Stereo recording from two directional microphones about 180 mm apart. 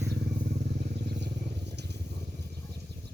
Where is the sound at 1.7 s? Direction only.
70° right (ahead or behind).